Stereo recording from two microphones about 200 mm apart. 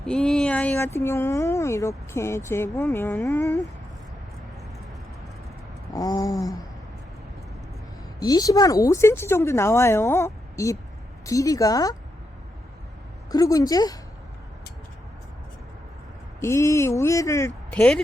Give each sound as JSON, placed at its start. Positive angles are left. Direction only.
{"t": 0.0, "sound": "speech", "side_deg": 5}
{"t": 5.9, "sound": "speech", "side_deg": 20}
{"t": 8.2, "sound": "speech", "side_deg": 20}
{"t": 13.3, "sound": "speech", "side_deg": 15}
{"t": 16.4, "sound": "speech", "side_deg": 15}
{"t": 17.7, "sound": "speech", "side_deg": 5}